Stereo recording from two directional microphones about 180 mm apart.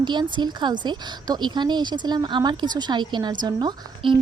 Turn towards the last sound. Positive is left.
turn(degrees=-25)  # may be behind; listen again after turning